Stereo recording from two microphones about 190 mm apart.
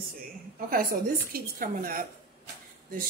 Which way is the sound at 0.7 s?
50° right (ahead or behind).